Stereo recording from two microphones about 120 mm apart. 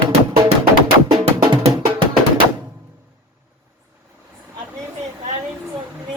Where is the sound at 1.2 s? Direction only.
55° right (ahead or behind).